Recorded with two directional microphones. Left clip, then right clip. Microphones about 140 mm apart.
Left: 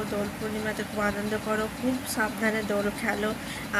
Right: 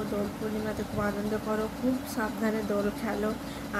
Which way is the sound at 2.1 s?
5° right (ahead or behind).